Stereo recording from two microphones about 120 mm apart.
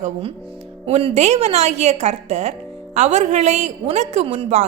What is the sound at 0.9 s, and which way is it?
A woman's voice, 65° right (ahead or behind).